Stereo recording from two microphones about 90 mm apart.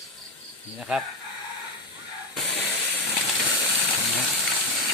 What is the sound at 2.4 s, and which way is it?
Steam, 20° left (ahead or behind).